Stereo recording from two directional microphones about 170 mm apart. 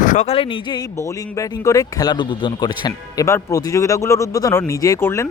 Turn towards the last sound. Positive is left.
turn(degrees=15)  # may be behind; listen again after turning